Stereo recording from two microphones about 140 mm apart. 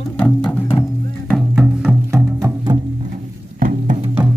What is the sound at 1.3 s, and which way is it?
Music, centre (ahead or behind).